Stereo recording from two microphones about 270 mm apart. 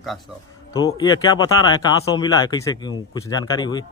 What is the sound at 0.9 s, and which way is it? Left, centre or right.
Speech, centre.